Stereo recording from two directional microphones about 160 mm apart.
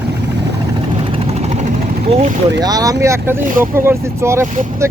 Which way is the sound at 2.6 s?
25° right (ahead or behind).